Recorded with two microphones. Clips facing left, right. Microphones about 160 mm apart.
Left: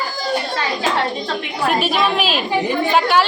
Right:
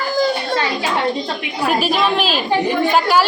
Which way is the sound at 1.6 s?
Centre (ahead or behind).